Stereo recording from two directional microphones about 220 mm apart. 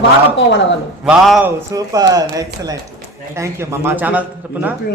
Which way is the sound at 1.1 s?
5° right (ahead or behind).